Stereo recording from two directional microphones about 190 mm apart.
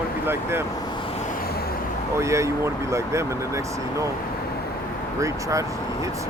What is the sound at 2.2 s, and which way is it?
Speech, 15° right (ahead or behind).